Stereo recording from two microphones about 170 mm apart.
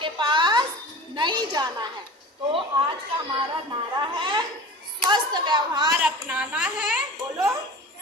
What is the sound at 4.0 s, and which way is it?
Speech, 25° right (ahead or behind).